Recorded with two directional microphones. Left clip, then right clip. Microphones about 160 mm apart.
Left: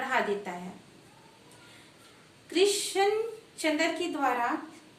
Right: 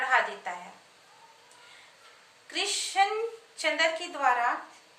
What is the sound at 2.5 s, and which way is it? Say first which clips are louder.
A woman's voice: left 3 dB; 10° right (ahead or behind).